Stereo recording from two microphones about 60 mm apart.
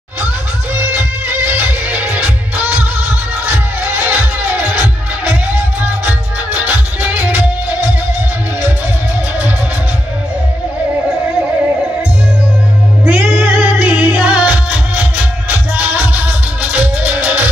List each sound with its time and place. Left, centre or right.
0.7 s music: right
13.0 s music: right